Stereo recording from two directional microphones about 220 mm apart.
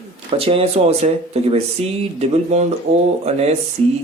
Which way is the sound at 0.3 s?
25° right (ahead or behind).